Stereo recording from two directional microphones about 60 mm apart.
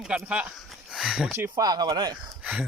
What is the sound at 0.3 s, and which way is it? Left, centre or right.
Speech, right.